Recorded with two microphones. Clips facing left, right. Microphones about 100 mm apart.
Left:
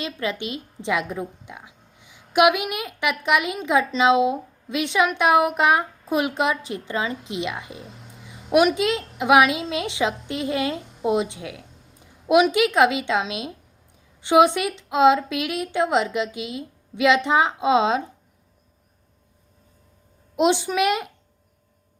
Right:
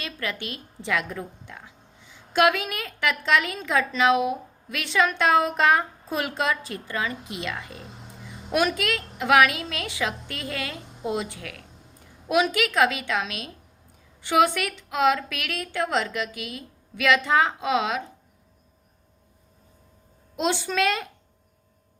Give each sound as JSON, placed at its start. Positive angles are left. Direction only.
{"t": 0.0, "sound": "a woman's voice", "side_deg": 20}
{"t": 20.3, "sound": "a woman's voice", "side_deg": 20}